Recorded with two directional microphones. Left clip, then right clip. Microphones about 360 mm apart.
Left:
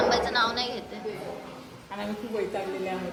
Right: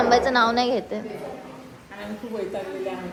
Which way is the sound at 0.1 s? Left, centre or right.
Centre.